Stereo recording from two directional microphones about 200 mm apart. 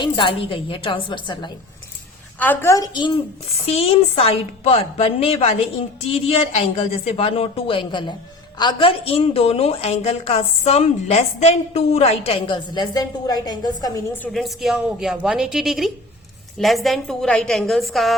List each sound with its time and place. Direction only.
0.0 s a woman's voice: 25° left (ahead or behind)
2.4 s a woman's voice: 10° left (ahead or behind)
14.2 s a woman's voice: centre (ahead or behind)